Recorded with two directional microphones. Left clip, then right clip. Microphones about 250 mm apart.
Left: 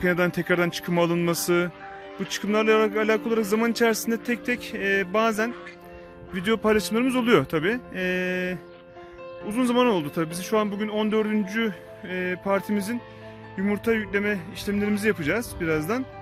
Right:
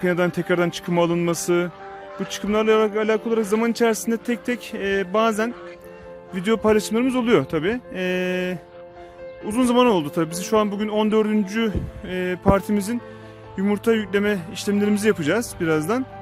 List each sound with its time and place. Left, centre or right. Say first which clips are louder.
0.0 s speech: right 2 dB; centre